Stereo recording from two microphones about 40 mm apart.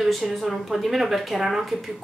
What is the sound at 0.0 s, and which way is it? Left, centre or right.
Speech, centre.